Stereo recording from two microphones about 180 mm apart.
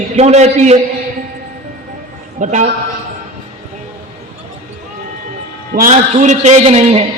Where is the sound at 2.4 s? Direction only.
45° right (ahead or behind).